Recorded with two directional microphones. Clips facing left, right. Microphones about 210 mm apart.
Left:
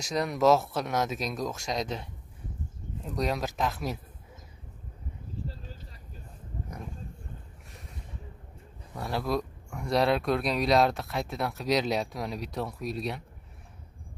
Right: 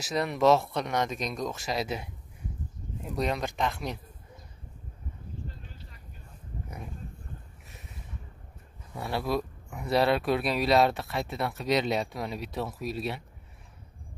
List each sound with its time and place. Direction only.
0.0 s speech: centre (ahead or behind)
5.5 s a sound: 35° left (ahead or behind)
8.9 s speech: centre (ahead or behind)